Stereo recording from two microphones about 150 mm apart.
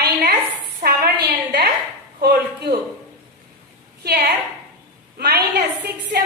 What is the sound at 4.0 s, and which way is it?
A woman's voice, 90° right.